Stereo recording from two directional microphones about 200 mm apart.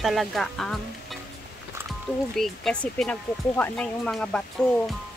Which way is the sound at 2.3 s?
Centre (ahead or behind).